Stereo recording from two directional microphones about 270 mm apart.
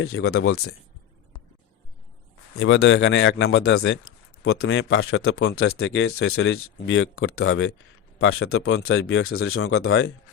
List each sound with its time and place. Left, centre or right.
0.0 s a man's voice: left
2.6 s speech: left